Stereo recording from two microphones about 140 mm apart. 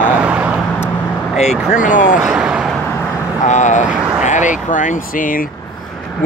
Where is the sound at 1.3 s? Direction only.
55° left (ahead or behind).